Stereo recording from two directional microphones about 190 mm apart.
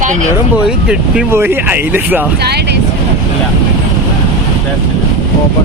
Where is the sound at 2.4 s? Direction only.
60° right (ahead or behind).